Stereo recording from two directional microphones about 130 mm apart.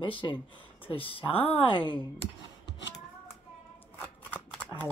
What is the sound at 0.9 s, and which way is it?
Speech, 45° left (ahead or behind).